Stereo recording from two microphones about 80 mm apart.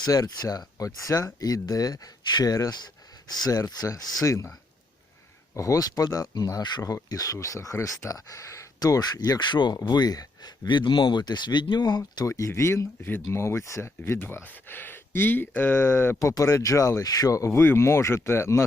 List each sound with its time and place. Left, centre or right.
0.0 s speech: left
3.3 s speech: left
5.5 s speech: left
6.8 s speech: left
9.4 s speech: left
10.7 s speech: left
12.3 s speech: left
16.2 s speech: left